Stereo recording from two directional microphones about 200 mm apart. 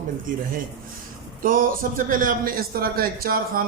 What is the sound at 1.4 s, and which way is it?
A man's voice, 45° right (ahead or behind).